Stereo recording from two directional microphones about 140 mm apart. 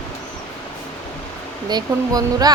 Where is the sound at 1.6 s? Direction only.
30° right (ahead or behind).